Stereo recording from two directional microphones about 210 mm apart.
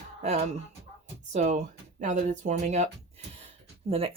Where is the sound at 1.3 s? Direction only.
35° right (ahead or behind).